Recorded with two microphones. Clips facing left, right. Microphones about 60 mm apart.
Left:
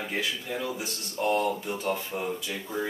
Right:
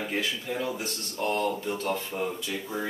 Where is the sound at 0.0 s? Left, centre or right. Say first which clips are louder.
Right 1 dB; centre.